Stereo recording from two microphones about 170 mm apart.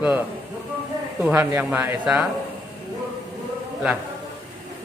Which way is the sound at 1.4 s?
20° right (ahead or behind).